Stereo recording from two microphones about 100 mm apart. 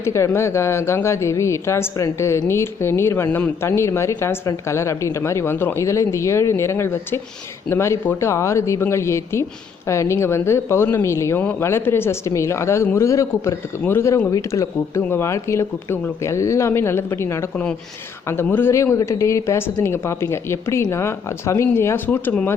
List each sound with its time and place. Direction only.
0.0 s speech: 30° left (ahead or behind)
3.2 s a man's voice: 15° left (ahead or behind)
3.6 s speech: 30° left (ahead or behind)